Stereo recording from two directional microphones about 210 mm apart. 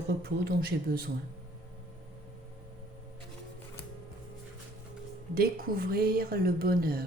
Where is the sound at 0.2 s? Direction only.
50° right (ahead or behind).